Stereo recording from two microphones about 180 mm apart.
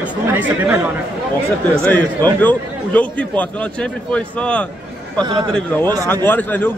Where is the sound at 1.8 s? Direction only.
10° left (ahead or behind).